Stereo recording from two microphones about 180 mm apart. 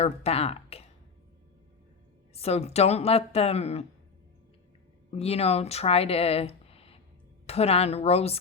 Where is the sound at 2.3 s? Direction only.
35° left (ahead or behind).